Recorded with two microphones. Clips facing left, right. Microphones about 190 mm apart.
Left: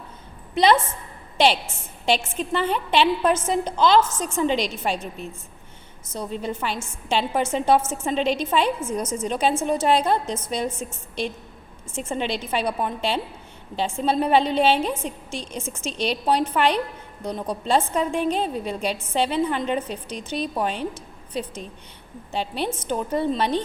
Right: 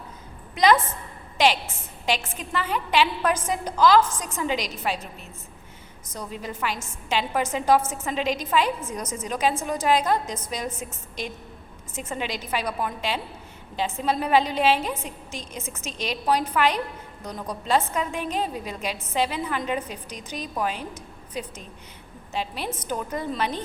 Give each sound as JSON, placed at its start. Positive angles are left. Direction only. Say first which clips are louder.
{"t": 0.5, "sound": "a woman's voice", "louder": "left 1 dB", "side_deg": 30}
{"t": 2.0, "sound": "a woman's voice", "louder": "left 5 dB", "side_deg": 30}
{"t": 6.4, "sound": "a woman's voice", "louder": "left 3 dB", "side_deg": 30}